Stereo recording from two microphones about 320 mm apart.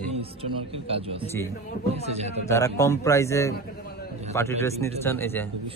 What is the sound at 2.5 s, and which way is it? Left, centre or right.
A man's voice, centre.